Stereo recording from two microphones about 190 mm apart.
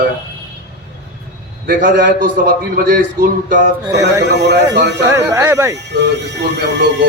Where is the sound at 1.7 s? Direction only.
50° right (ahead or behind).